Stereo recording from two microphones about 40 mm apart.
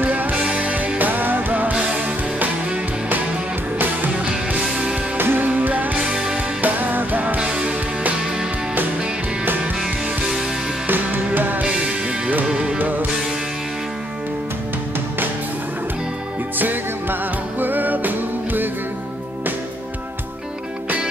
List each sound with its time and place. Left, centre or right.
0.0 s music: right
0.9 s music: right
1.7 s music: right
5.1 s music: right
5.6 s music: right
5.9 s music: centre
6.6 s music: right
7.3 s music: right
9.8 s music: centre
10.9 s music: right
11.6 s music: right
12.7 s music: right
16.5 s music: right